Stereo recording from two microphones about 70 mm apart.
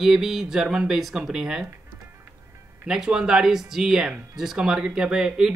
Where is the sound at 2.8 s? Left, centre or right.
Centre.